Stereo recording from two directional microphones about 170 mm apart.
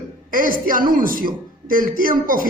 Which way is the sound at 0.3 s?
55° right (ahead or behind).